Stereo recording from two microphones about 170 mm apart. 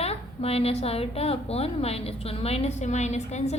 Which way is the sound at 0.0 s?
35° left (ahead or behind).